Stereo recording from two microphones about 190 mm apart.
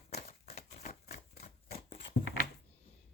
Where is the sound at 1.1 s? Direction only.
55° left (ahead or behind).